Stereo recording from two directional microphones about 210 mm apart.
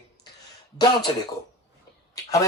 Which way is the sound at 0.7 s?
20° left (ahead or behind).